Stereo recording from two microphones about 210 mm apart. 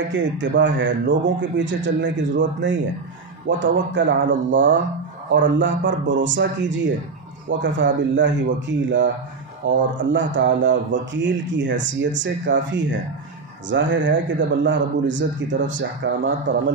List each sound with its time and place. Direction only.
0.1 s speech: 60° right (ahead or behind)